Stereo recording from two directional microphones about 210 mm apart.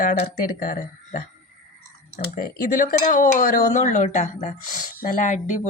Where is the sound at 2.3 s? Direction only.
40° left (ahead or behind).